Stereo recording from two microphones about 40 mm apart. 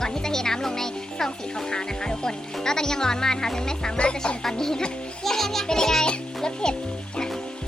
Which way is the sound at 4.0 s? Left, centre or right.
Left.